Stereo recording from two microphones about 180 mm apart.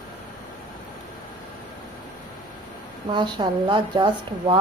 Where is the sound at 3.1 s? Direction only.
25° right (ahead or behind).